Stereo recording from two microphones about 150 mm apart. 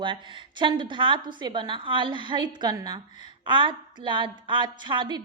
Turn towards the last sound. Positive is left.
turn(degrees=-30)  # may be behind; listen again after turning